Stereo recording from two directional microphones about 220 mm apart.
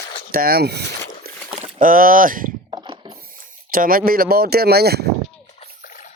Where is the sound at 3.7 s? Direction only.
40° right (ahead or behind).